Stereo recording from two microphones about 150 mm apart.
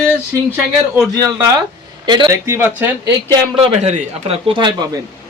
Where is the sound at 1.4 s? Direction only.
20° right (ahead or behind).